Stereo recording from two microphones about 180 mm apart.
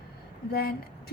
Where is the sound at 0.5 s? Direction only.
60° left (ahead or behind).